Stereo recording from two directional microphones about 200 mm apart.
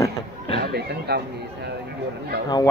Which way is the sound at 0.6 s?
55° right (ahead or behind).